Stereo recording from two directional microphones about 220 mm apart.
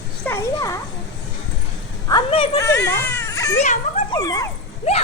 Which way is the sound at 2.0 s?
20° left (ahead or behind).